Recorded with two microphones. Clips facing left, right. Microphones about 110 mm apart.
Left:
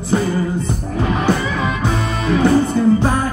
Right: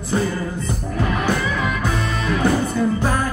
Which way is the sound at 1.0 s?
25° left (ahead or behind).